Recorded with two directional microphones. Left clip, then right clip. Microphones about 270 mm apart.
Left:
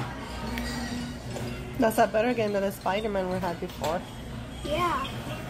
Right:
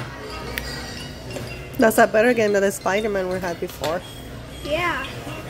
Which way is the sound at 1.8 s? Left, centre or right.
Centre.